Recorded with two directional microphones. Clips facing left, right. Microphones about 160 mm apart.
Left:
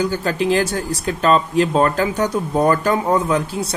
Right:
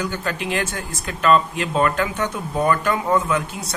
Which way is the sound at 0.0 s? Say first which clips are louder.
Left 6 dB; 35° left (ahead or behind).